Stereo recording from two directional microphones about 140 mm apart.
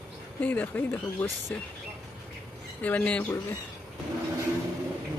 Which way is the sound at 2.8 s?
10° left (ahead or behind).